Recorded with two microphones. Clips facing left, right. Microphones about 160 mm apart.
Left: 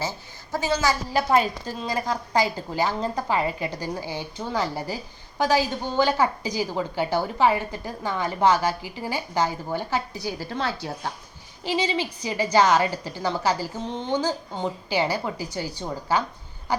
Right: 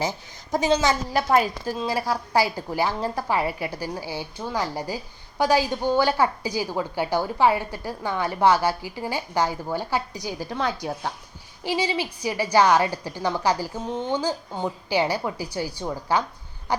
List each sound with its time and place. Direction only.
0.0 s a woman's voice: 15° right (ahead or behind)
1.3 s a woman's voice: 5° right (ahead or behind)